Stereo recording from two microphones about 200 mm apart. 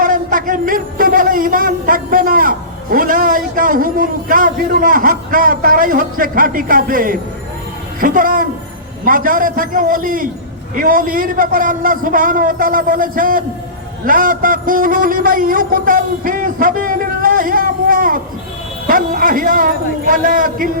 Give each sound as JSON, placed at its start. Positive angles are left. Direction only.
{"t": 0.0, "sound": "a man's voice", "side_deg": -45}